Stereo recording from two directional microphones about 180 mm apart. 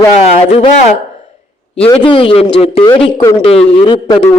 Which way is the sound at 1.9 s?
30° left (ahead or behind).